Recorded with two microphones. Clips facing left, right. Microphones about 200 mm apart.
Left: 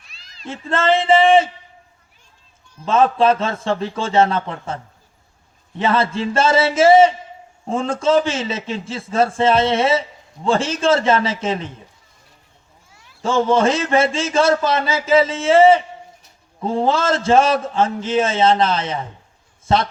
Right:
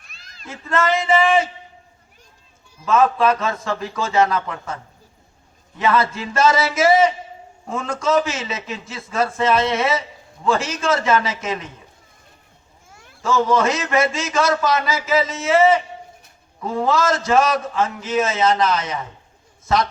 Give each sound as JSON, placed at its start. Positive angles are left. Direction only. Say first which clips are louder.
{"t": 0.0, "sound": "cat", "louder": "right 1 dB", "side_deg": -50}
{"t": 0.4, "sound": "a man's voice", "louder": "left 2 dB", "side_deg": 30}
{"t": 2.8, "sound": "a man's voice", "louder": "left 2 dB", "side_deg": 30}
{"t": 12.9, "sound": "cat", "louder": "right 6 dB", "side_deg": -50}
{"t": 13.2, "sound": "a man's voice", "louder": "left 2 dB", "side_deg": 30}